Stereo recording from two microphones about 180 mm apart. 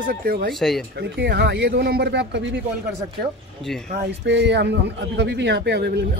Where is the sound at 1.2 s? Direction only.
65° right (ahead or behind).